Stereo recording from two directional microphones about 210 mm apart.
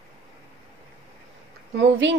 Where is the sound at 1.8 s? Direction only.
60° right (ahead or behind).